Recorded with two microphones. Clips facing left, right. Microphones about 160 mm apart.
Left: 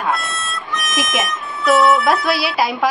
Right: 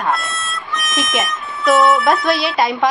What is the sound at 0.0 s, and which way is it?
A woman's voice, centre (ahead or behind).